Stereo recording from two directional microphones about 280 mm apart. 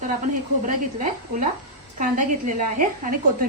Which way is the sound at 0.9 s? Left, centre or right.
Right.